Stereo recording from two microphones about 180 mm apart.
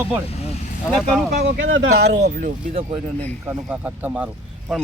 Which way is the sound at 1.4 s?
90° right.